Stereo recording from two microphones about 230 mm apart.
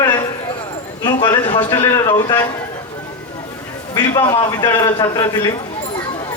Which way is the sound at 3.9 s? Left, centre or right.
Centre.